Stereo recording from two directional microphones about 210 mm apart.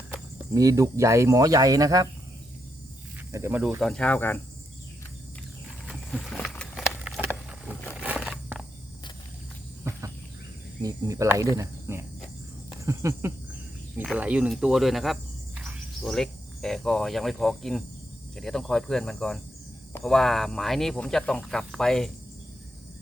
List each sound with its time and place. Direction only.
0.5 s speech: 15° right (ahead or behind)
3.3 s speech: 10° right (ahead or behind); by 4.4 s 10° left (ahead or behind)
5.8 s a sound: centre (ahead or behind)
10.8 s speech: 15° right (ahead or behind); by 22.1 s centre (ahead or behind)